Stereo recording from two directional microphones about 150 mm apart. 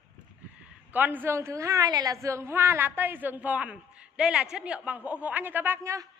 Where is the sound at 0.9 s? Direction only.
10° right (ahead or behind).